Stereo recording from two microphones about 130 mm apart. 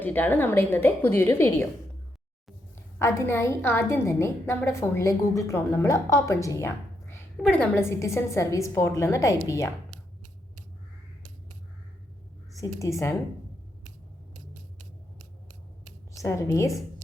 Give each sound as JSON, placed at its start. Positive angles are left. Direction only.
{"t": 0.0, "sound": "a woman's voice", "side_deg": 15}
{"t": 3.0, "sound": "a woman's voice", "side_deg": 20}
{"t": 7.4, "sound": "a woman's voice", "side_deg": 10}
{"t": 7.8, "sound": "a woman's voice", "side_deg": 20}
{"t": 12.5, "sound": "a woman's voice", "side_deg": 25}
{"t": 16.2, "sound": "a woman's voice", "side_deg": 25}